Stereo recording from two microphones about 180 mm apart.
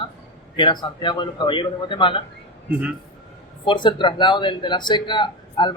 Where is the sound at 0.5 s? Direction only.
25° left (ahead or behind).